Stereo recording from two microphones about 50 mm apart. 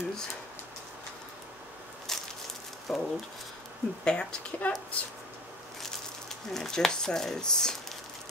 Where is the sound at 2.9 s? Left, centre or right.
Centre.